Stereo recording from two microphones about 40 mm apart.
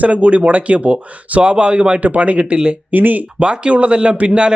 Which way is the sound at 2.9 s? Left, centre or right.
Right.